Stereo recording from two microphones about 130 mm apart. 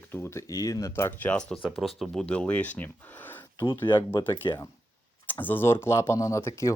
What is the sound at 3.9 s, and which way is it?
Speech, 35° left (ahead or behind).